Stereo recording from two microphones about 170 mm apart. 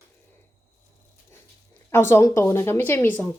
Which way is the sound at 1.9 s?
15° left (ahead or behind).